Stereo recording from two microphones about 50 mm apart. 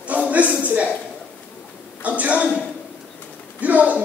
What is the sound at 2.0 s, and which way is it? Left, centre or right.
Speech, right.